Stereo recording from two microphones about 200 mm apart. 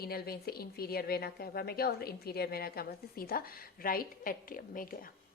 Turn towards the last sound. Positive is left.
turn(degrees=45)  # may be behind; listen again after turning